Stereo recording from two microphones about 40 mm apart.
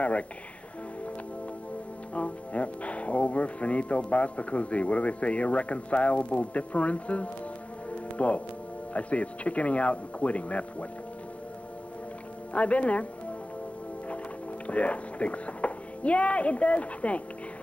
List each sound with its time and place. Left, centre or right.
2.1 s speech: left
7.9 s music: left
8.9 s speech: left
12.5 s speech: left
14.7 s speech: left